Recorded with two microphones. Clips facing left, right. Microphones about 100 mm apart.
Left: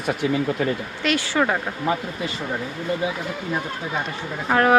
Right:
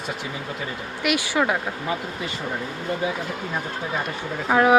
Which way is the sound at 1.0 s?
15° right (ahead or behind).